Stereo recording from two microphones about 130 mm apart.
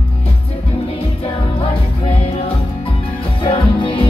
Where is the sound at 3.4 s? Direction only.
40° left (ahead or behind).